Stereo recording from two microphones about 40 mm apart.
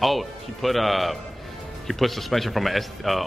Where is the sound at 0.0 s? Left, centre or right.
Centre.